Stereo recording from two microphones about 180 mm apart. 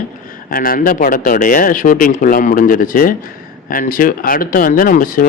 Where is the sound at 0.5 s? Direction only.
50° left (ahead or behind).